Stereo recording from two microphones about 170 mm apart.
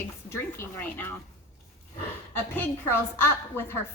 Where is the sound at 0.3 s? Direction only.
15° left (ahead or behind).